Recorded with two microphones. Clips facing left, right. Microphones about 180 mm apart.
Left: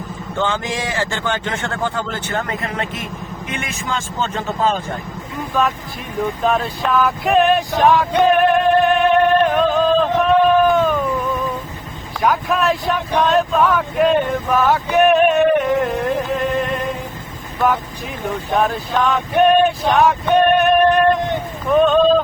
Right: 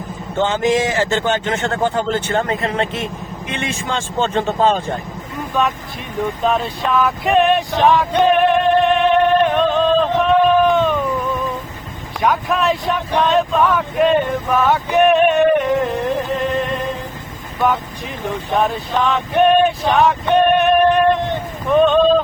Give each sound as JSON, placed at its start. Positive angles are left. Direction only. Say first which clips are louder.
{"t": 0.3, "sound": "speech", "louder": "right 6 dB", "side_deg": -20}
{"t": 6.2, "sound": "vehicle", "louder": "even", "side_deg": 0}
{"t": 10.7, "sound": "wail", "louder": "even", "side_deg": 5}
{"t": 12.2, "sound": "male singing", "louder": "even", "side_deg": 0}
{"t": 18.3, "sound": "male singing", "louder": "even", "side_deg": 0}